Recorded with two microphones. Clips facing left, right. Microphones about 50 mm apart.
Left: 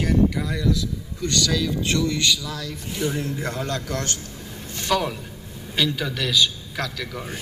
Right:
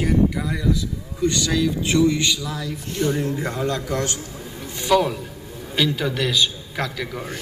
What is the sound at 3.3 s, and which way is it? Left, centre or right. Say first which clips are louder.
A man's voice: right 3 dB; centre.